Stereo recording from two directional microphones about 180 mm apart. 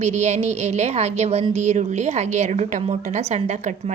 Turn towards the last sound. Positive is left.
turn(degrees=-40)  # may be behind; listen again after turning